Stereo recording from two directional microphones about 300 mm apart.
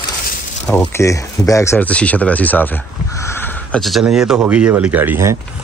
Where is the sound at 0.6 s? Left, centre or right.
Centre.